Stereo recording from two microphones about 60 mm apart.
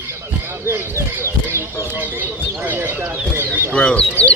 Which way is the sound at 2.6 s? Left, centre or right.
Right.